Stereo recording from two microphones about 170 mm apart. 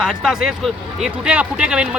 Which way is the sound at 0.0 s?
5° right (ahead or behind).